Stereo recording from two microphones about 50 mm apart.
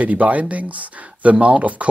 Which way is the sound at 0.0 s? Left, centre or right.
Right.